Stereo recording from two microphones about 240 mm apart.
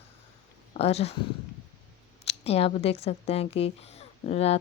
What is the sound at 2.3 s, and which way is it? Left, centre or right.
A child's voice, left.